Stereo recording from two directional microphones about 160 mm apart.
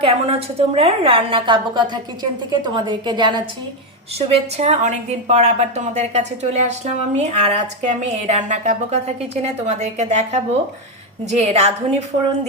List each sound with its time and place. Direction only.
0.0 s a woman's voice: 35° right (ahead or behind)
4.3 s a woman's voice: 40° right (ahead or behind)